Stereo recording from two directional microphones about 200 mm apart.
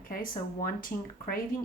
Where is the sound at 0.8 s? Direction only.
45° left (ahead or behind).